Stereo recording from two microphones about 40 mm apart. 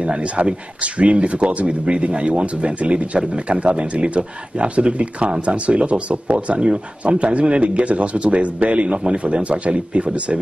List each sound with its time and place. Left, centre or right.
0.0 s speech: right